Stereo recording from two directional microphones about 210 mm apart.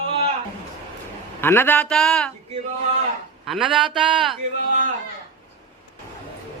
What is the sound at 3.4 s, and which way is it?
Speech, centre (ahead or behind).